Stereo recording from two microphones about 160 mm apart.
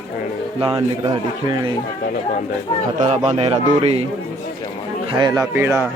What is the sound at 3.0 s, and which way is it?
Speech, 40° right (ahead or behind).